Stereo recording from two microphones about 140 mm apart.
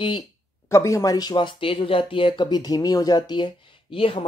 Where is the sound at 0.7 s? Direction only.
20° left (ahead or behind).